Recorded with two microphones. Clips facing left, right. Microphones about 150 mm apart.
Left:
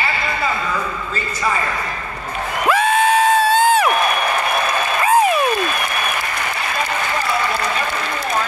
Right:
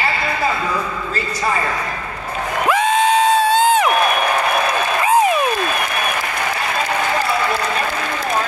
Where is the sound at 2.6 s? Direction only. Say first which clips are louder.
Even; 20° right (ahead or behind).